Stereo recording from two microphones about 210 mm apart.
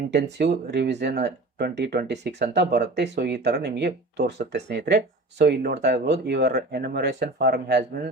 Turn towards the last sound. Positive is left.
turn(degrees=-50)  # may be behind; listen again after turning